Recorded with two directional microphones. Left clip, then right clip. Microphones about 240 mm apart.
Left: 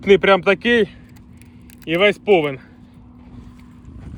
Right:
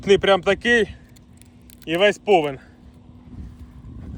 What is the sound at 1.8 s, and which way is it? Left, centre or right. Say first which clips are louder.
Speech: left 2 dB; centre.